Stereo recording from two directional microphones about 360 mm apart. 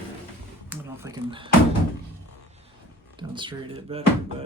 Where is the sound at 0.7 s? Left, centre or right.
Centre.